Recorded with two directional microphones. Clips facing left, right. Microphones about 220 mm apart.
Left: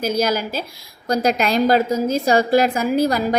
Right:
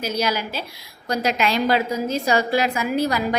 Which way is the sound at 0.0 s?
45° left (ahead or behind).